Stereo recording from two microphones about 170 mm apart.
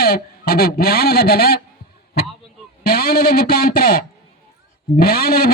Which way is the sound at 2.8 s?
60° left (ahead or behind).